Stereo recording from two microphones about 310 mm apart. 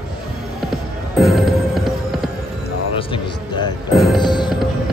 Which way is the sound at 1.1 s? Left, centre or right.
Centre.